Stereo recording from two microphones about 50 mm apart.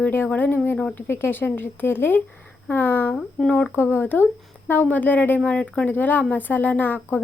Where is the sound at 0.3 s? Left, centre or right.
Left.